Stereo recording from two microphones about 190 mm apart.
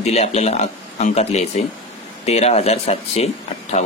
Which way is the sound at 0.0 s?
35° left (ahead or behind).